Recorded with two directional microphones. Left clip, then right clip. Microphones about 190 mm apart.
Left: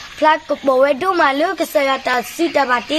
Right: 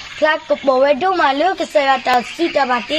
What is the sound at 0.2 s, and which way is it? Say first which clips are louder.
A woman's voice: left 1 dB; 20° left (ahead or behind).